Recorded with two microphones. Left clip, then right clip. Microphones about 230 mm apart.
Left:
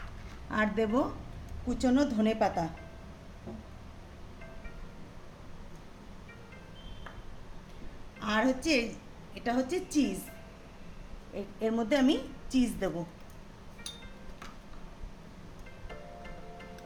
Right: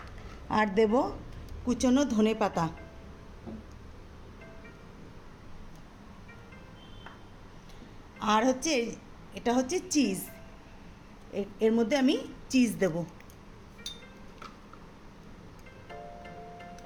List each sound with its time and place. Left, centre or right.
0.5 s a woman's voice: right
8.2 s a woman's voice: right
11.3 s a woman's voice: right
15.9 s music: centre